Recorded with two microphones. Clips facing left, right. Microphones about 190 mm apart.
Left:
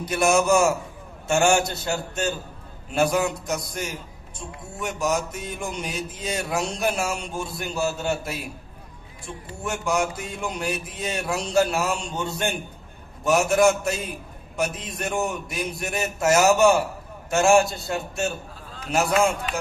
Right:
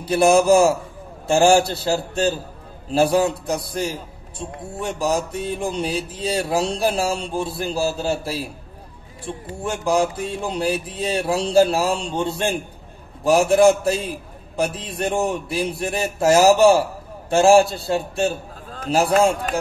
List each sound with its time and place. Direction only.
0.0 s mantra: 30° right (ahead or behind)